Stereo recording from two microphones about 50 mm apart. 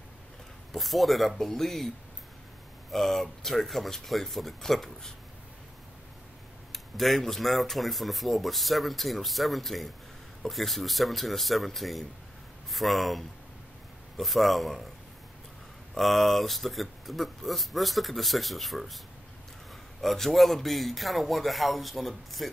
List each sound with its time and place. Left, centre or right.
0.7 s speech: centre
2.9 s speech: centre
6.7 s speech: centre
15.9 s speech: centre
20.0 s speech: centre